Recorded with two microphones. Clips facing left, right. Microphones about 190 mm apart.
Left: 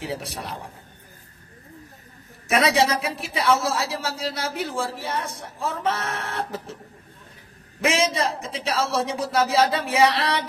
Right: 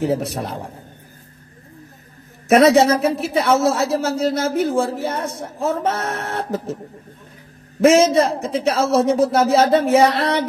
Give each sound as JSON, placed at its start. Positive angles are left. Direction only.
{"t": 0.0, "sound": "speech", "side_deg": -45}
{"t": 2.7, "sound": "speech", "side_deg": -50}
{"t": 7.8, "sound": "speech", "side_deg": -45}